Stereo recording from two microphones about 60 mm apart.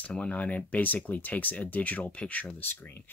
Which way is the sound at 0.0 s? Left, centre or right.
Left.